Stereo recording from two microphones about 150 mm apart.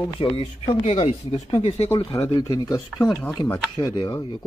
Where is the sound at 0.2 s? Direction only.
40° left (ahead or behind).